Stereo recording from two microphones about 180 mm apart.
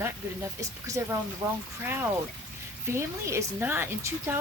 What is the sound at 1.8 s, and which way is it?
Speech, 10° right (ahead or behind).